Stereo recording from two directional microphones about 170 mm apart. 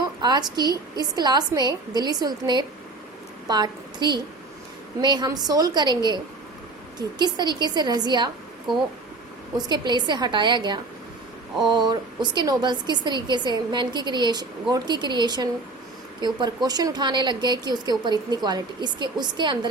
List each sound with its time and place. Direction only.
0.0 s a woman's voice: 25° right (ahead or behind)
7.2 s a woman's voice: 25° right (ahead or behind)
9.6 s a woman's voice: 25° right (ahead or behind)
16.6 s a woman's voice: 25° right (ahead or behind)